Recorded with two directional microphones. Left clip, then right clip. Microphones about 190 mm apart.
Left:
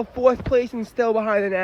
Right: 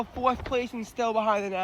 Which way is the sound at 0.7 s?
25° left (ahead or behind).